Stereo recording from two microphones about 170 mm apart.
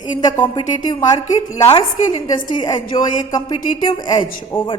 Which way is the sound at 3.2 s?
25° left (ahead or behind).